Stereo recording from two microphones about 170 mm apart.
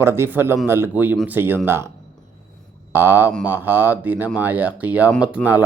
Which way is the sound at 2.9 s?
10° right (ahead or behind).